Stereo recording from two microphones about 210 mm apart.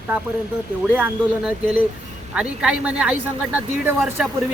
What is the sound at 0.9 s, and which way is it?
Speech, 10° right (ahead or behind).